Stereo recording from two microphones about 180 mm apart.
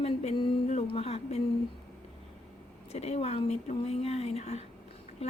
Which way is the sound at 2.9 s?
35° left (ahead or behind).